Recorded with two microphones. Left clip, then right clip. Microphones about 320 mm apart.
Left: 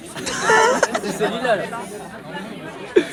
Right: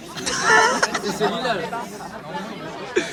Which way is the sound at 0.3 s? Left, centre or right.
Centre.